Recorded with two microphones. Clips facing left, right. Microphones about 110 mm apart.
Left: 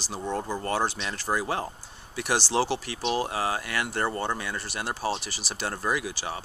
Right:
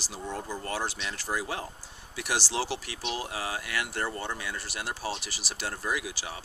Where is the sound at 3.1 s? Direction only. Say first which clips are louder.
Left 7 dB; 50° left (ahead or behind).